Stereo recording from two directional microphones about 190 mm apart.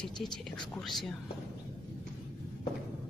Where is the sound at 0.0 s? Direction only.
5° left (ahead or behind).